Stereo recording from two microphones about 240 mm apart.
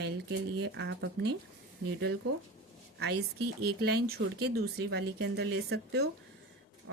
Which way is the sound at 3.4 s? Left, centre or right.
Right.